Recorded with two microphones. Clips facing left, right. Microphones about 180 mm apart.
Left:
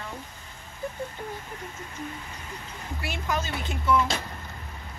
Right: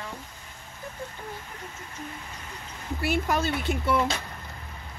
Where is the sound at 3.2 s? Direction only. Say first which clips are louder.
Right 3 dB; 60° right (ahead or behind).